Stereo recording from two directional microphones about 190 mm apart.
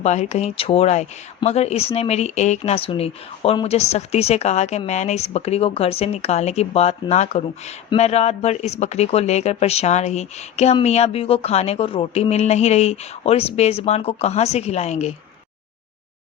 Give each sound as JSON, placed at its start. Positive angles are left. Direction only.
{"t": 0.0, "sound": "speech", "side_deg": 35}